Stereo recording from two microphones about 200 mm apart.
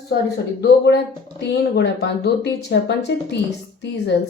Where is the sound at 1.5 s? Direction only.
55° left (ahead or behind).